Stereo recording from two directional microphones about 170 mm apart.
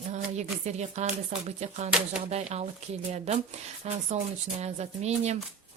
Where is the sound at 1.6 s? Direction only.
40° right (ahead or behind).